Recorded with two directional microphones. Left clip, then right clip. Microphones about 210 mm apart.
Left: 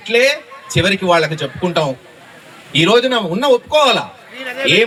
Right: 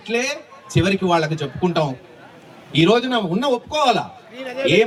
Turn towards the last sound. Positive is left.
turn(degrees=-10)  # may be behind; listen again after turning